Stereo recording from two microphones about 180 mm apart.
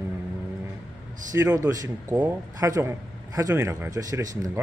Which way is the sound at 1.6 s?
20° right (ahead or behind).